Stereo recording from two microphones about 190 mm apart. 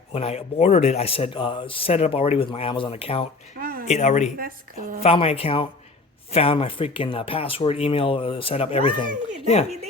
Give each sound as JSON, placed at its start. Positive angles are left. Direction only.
{"t": 0.1, "sound": "a man's voice", "side_deg": 35}
{"t": 3.6, "sound": "a sound", "side_deg": -50}
{"t": 3.8, "sound": "a man's voice", "side_deg": 35}
{"t": 4.4, "sound": "a woman's voice", "side_deg": -50}
{"t": 5.0, "sound": "speech", "side_deg": 30}